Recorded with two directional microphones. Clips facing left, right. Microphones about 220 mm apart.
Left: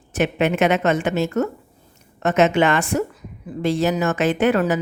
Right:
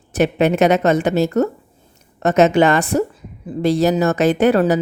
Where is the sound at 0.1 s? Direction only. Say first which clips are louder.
Right 4 dB; 35° right (ahead or behind).